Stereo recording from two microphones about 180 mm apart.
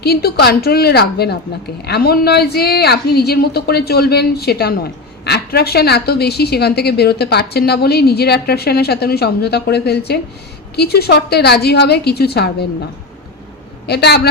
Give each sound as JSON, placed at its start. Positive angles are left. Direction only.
{"t": 0.0, "sound": "a woman's voice", "side_deg": 60}
{"t": 13.8, "sound": "a woman's voice", "side_deg": 65}